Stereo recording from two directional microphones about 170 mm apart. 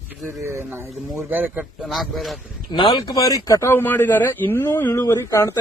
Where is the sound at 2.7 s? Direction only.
30° left (ahead or behind).